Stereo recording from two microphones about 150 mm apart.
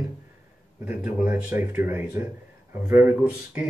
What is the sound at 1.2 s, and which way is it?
Speech, 5° right (ahead or behind).